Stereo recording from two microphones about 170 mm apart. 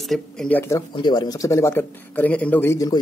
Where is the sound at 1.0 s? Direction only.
25° left (ahead or behind).